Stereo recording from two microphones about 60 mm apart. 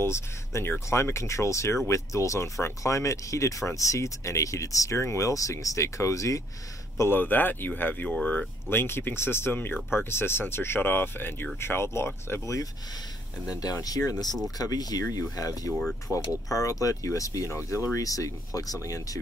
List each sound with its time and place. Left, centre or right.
0.0 s speech: left
7.1 s speech: left
8.6 s speech: left
13.5 s speech: left
16.1 s speech: left